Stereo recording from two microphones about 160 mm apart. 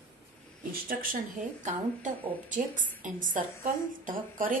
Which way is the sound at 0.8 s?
60° right (ahead or behind).